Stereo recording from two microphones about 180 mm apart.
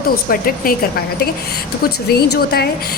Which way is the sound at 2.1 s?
65° left (ahead or behind).